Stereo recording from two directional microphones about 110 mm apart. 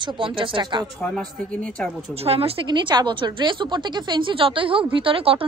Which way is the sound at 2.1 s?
65° right (ahead or behind).